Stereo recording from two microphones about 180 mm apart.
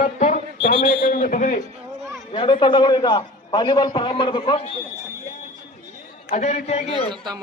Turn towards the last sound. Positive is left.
turn(degrees=35)  # may be behind; listen again after turning